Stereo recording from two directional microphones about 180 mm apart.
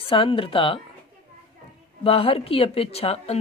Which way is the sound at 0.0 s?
30° left (ahead or behind).